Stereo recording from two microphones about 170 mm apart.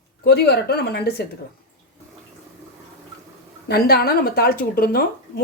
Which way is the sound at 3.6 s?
70° left (ahead or behind).